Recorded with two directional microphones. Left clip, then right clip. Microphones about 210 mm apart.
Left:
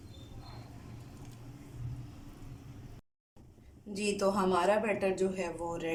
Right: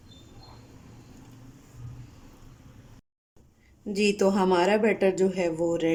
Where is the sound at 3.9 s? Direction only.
40° right (ahead or behind).